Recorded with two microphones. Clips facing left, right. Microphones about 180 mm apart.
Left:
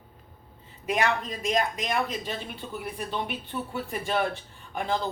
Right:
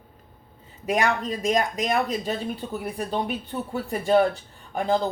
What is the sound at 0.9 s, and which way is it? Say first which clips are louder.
Speech: right 3 dB; 45° right (ahead or behind).